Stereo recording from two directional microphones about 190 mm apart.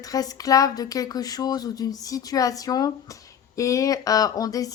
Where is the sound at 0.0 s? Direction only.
20° left (ahead or behind).